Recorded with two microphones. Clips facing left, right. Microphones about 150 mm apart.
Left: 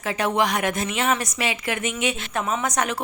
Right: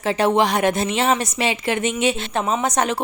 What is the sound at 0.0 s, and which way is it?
A woman's voice, 30° right (ahead or behind).